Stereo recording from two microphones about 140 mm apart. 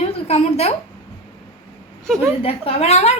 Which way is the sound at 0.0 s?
45° left (ahead or behind).